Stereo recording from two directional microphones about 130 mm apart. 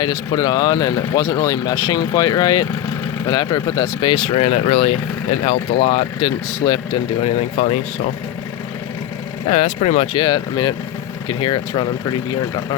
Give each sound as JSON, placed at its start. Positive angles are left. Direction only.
{"t": 0.0, "sound": "speech", "side_deg": 30}
{"t": 4.4, "sound": "speech", "side_deg": 55}
{"t": 7.6, "sound": "speech", "side_deg": 55}
{"t": 9.5, "sound": "speech", "side_deg": 55}
{"t": 10.1, "sound": "speech", "side_deg": 35}